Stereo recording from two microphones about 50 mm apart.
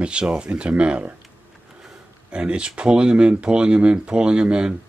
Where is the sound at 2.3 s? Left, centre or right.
Right.